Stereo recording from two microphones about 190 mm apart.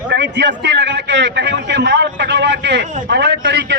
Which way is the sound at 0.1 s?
65° right (ahead or behind).